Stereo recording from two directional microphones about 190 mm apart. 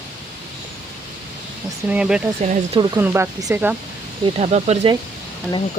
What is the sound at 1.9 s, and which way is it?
Speech, 5° right (ahead or behind).